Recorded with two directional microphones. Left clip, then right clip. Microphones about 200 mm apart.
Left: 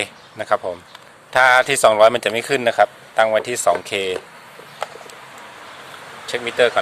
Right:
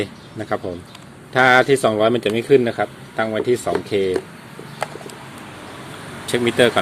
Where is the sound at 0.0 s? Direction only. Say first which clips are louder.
Left 1 dB; 25° left (ahead or behind).